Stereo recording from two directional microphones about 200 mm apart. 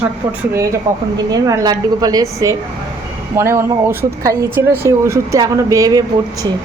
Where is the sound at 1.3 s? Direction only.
20° right (ahead or behind).